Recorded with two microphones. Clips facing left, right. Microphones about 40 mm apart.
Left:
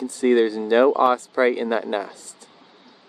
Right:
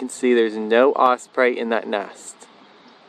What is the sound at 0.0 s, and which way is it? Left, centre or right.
Speech, right.